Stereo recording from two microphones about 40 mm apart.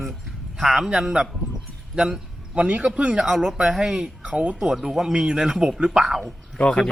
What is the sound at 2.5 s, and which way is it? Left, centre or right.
Speech, right.